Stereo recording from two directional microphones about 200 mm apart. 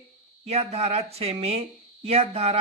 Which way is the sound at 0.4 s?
30° right (ahead or behind).